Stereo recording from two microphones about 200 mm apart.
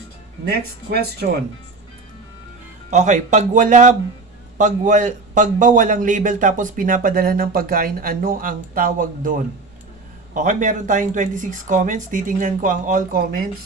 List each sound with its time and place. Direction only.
0.5 s a man's voice: 50° right (ahead or behind)
2.9 s a man's voice: 35° right (ahead or behind)
10.3 s speech: 40° right (ahead or behind)